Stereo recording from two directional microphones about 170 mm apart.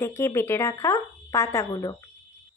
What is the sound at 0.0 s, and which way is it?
Speech, 15° left (ahead or behind).